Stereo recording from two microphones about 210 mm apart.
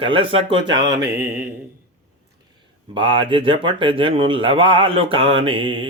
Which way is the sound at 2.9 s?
25° right (ahead or behind).